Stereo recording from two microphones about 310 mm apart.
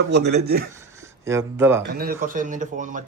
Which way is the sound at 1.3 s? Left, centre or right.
Centre.